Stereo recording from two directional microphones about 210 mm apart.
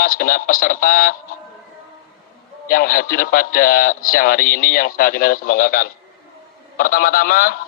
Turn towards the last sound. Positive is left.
turn(degrees=45)  # may be behind; listen again after turning